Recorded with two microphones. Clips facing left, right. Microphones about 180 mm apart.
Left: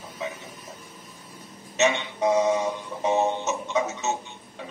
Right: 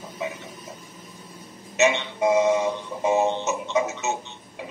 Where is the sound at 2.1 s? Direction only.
10° right (ahead or behind).